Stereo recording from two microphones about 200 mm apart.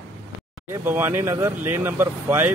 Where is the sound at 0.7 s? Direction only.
10° right (ahead or behind).